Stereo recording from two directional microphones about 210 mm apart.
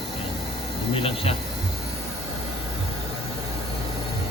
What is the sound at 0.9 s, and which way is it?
Speech, 25° left (ahead or behind).